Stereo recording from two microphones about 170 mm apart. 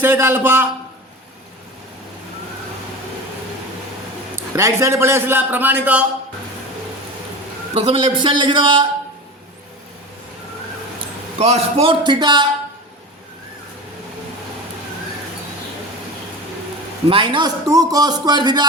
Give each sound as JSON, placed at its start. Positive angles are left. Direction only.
{"t": 0.0, "sound": "a man's voice", "side_deg": -15}
{"t": 4.5, "sound": "a man's voice", "side_deg": -15}
{"t": 7.7, "sound": "a man's voice", "side_deg": -35}
{"t": 11.3, "sound": "a man's voice", "side_deg": -35}
{"t": 17.1, "sound": "a man's voice", "side_deg": -30}